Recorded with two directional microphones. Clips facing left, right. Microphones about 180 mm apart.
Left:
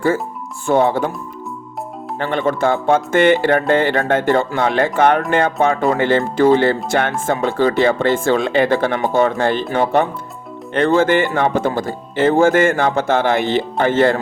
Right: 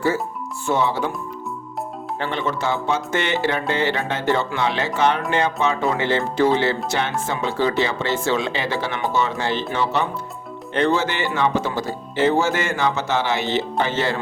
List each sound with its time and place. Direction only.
0.7 s speech: 50° left (ahead or behind)
2.1 s speech: 55° left (ahead or behind)